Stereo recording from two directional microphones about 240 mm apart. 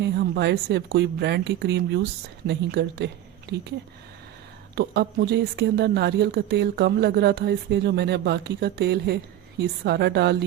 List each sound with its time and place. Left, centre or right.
0.0 s speech: right
4.7 s speech: right